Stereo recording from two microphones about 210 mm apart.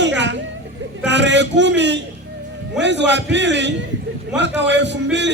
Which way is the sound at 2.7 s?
55° right (ahead or behind).